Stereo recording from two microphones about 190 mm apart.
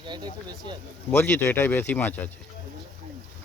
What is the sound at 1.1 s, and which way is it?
Speech, 10° left (ahead or behind).